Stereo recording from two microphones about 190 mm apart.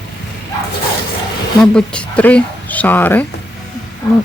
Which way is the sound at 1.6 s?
5° left (ahead or behind).